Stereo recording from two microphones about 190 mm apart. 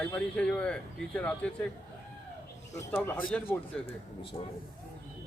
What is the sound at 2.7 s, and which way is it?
A man's voice, 10° left (ahead or behind).